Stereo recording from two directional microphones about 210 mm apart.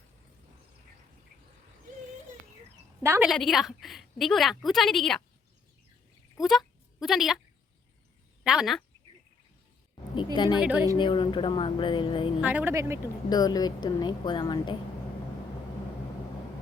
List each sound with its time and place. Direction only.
3.0 s speech: 10° right (ahead or behind)
3.2 s a woman's voice: centre (ahead or behind)
6.4 s speech: centre (ahead or behind)
8.4 s a woman's voice: centre (ahead or behind)
10.3 s a woman's voice: 20° left (ahead or behind)
10.6 s speech: 5° right (ahead or behind)
10.9 s a woman's voice: 20° left (ahead or behind)
12.4 s speech: 5° right (ahead or behind)
13.3 s a woman's voice: 20° left (ahead or behind)